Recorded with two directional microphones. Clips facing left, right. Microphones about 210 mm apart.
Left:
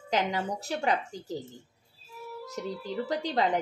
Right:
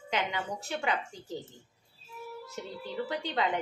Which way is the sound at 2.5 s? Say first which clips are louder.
Left 7 dB; 35° left (ahead or behind).